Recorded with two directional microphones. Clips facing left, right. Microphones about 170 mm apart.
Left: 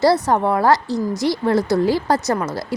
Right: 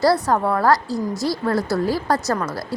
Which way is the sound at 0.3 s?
20° left (ahead or behind).